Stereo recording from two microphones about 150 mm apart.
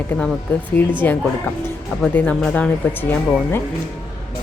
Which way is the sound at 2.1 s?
10° left (ahead or behind).